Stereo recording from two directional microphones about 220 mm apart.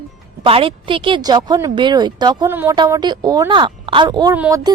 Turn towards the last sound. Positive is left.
turn(degrees=-15)  # may be behind; listen again after turning